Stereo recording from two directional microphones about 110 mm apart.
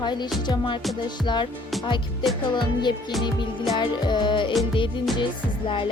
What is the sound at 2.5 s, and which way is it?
Music, 45° left (ahead or behind).